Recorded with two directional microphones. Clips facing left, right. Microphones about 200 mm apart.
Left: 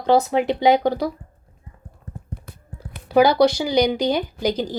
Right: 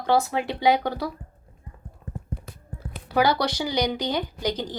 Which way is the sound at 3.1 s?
10° left (ahead or behind).